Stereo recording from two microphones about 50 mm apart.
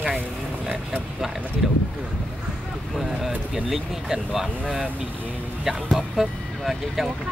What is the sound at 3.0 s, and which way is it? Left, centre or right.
Speech, centre.